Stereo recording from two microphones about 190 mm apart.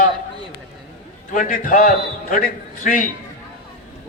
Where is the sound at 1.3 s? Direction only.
45° left (ahead or behind).